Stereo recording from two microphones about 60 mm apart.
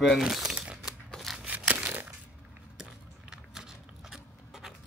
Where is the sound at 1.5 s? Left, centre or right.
Right.